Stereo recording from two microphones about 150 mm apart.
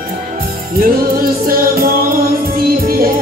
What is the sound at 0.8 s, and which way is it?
Music, 70° right (ahead or behind).